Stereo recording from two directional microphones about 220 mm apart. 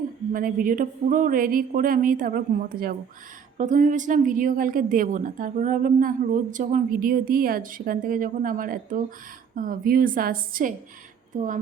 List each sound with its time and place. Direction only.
0.3 s a woman's voice: 40° right (ahead or behind)